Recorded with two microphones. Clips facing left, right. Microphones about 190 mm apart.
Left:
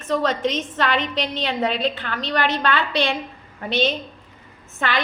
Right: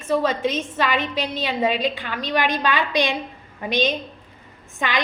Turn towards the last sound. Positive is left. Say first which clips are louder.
# left 1 dB
turn(degrees=-15)  # may be behind; listen again after turning